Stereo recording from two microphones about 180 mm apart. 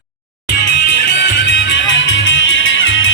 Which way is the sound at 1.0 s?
90° left.